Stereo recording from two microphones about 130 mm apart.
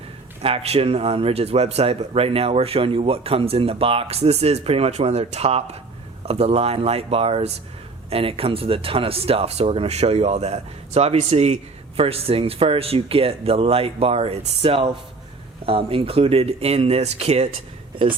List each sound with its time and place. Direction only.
0.4 s speech: 50° right (ahead or behind)